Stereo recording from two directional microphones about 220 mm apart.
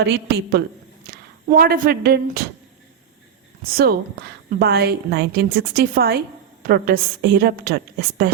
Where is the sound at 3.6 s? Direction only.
45° right (ahead or behind).